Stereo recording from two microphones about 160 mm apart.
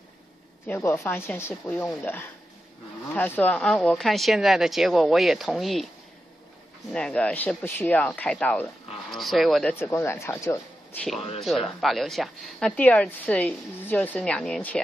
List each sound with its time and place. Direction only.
0.7 s speech: 15° left (ahead or behind)
3.1 s a woman's voice: 10° left (ahead or behind)
6.9 s a woman's voice: 5° left (ahead or behind)
9.8 s speech: 15° left (ahead or behind)
11.1 s speech: 40° left (ahead or behind)
11.4 s a woman's voice: centre (ahead or behind)